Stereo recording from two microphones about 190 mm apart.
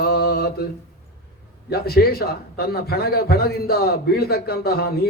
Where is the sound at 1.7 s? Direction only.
55° left (ahead or behind).